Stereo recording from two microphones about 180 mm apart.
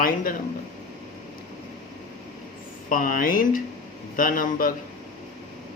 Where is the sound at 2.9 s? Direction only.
50° left (ahead or behind).